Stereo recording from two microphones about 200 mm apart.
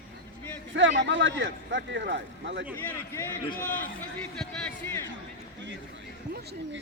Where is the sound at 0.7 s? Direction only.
65° right (ahead or behind).